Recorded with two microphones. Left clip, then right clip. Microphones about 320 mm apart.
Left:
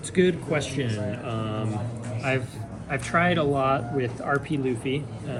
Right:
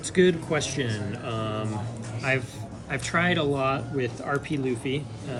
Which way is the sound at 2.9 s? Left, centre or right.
Centre.